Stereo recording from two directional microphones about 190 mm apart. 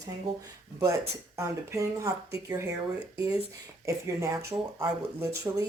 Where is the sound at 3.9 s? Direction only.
15° right (ahead or behind).